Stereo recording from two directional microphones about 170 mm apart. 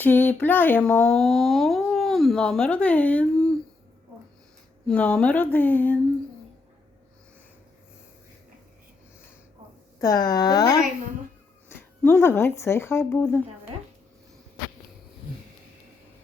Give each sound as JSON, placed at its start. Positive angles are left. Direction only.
{"t": 0.0, "sound": "speech", "side_deg": 10}
{"t": 4.9, "sound": "speech", "side_deg": 5}
{"t": 10.0, "sound": "speech", "side_deg": 20}
{"t": 12.0, "sound": "speech", "side_deg": 15}